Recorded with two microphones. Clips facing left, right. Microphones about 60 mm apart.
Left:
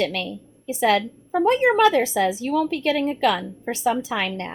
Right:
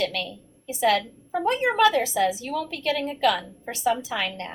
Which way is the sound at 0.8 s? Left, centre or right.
Left.